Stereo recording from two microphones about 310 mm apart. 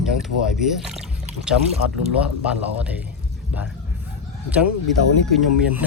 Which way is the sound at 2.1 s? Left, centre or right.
Centre.